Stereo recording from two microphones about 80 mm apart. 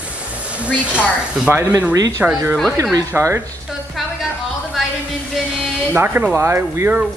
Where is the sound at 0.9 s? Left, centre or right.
Centre.